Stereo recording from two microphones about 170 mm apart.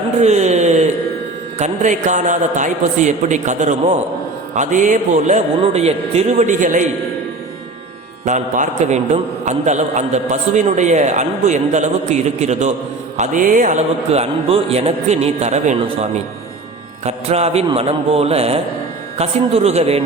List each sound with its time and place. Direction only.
0.2 s a sound: 40° right (ahead or behind)
1.5 s a man's voice: 45° right (ahead or behind)
8.2 s a man's voice: 45° right (ahead or behind)